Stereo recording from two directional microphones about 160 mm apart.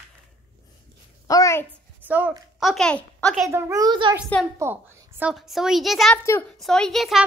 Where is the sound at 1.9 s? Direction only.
10° right (ahead or behind).